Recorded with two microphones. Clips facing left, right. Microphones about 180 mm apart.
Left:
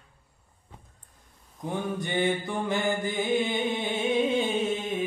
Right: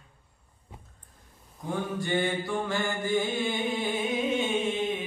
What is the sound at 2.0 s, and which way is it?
Mantra, 20° left (ahead or behind).